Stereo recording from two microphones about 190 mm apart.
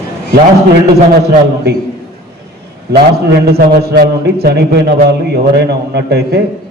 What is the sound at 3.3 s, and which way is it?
A man's voice, 55° right (ahead or behind).